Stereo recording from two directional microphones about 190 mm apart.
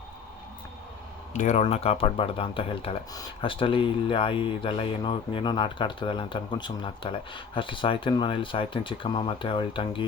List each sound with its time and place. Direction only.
1.3 s speech: 40° left (ahead or behind)